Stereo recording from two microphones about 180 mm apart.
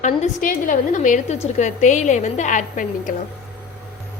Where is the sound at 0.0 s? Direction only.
45° left (ahead or behind).